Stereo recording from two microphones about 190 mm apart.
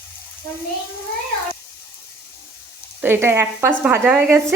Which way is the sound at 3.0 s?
10° right (ahead or behind).